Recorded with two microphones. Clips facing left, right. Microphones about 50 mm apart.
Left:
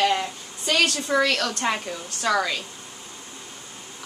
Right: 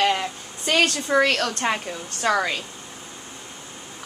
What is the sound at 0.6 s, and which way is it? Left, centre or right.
Speech, right.